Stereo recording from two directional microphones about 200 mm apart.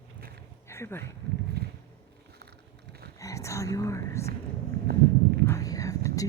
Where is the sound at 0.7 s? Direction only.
10° left (ahead or behind).